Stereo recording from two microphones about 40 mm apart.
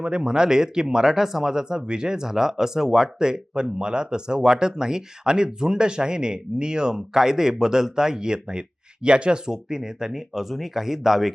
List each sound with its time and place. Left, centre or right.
0.0 s speech: right